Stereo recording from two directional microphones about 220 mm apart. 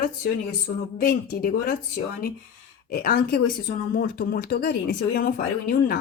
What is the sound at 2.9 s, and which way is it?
Speech, 40° left (ahead or behind).